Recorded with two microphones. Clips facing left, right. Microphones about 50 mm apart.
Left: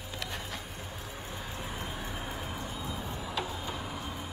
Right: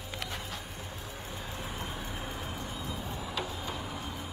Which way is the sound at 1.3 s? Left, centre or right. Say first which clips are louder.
Even; centre.